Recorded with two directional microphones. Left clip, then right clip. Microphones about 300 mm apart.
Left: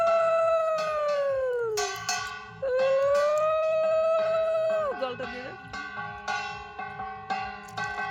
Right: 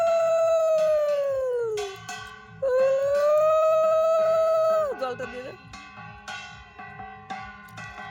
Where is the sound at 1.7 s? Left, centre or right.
Centre.